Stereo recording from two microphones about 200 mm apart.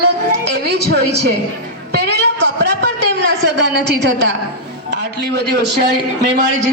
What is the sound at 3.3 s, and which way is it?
A woman's voice, 60° right (ahead or behind).